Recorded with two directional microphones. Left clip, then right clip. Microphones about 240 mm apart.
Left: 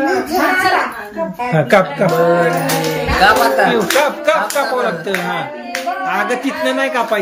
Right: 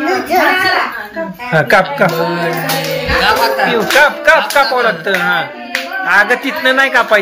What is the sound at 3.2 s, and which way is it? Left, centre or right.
Music, left.